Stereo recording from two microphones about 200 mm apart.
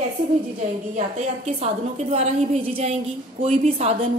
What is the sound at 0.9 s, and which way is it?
A woman's voice, 35° right (ahead or behind).